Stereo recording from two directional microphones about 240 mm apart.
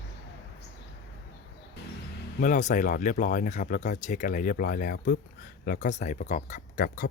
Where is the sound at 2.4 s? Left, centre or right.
Left.